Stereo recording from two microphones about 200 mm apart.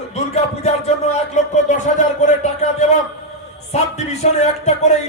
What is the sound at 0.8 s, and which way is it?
Music, 35° left (ahead or behind).